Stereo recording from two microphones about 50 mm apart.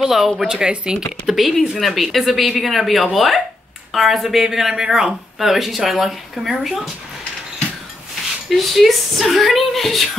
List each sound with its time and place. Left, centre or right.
0.0 s speech: centre
1.2 s speech: centre
8.5 s speech: centre